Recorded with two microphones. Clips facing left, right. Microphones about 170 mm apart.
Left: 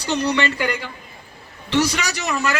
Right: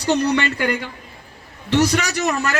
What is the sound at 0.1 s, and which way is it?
Speech, 50° right (ahead or behind).